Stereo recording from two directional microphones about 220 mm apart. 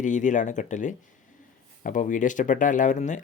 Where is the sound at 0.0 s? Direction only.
35° left (ahead or behind).